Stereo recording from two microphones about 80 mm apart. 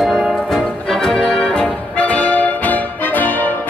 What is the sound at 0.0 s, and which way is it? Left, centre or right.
Music, centre.